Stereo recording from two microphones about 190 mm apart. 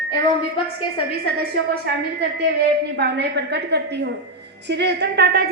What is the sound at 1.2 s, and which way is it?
Speech, 55° right (ahead or behind).